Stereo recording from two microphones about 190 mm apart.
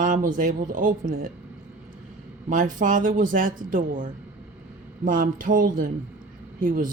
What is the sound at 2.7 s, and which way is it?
Speech, 45° right (ahead or behind).